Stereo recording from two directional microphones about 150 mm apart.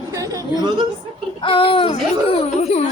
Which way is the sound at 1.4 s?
35° left (ahead or behind).